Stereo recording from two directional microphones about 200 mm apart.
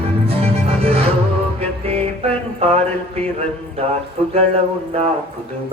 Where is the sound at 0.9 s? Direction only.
30° right (ahead or behind).